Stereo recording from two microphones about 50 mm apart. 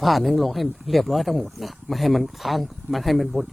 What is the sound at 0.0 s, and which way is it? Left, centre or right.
Speech, centre.